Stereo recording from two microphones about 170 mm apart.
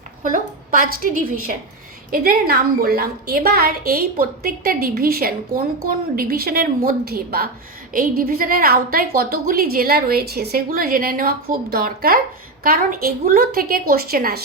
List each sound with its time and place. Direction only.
0.7 s a woman's voice: 55° right (ahead or behind)